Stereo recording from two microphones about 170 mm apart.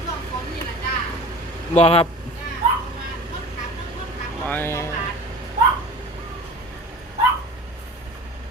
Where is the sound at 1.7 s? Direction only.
35° left (ahead or behind).